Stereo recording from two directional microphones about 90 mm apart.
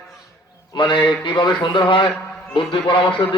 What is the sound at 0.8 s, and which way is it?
A man's voice, 65° left (ahead or behind).